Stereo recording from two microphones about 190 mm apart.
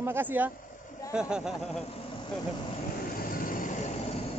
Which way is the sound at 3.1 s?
50° left (ahead or behind).